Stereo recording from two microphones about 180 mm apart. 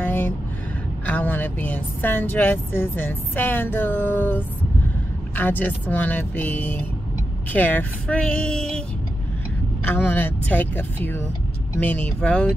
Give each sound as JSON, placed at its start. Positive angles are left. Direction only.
{"t": 0.0, "sound": "a sound", "side_deg": 10}
{"t": 1.0, "sound": "speech", "side_deg": 10}
{"t": 9.8, "sound": "speech", "side_deg": 10}